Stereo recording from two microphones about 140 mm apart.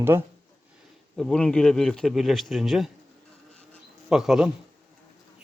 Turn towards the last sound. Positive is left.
turn(degrees=-5)  # may be behind; listen again after turning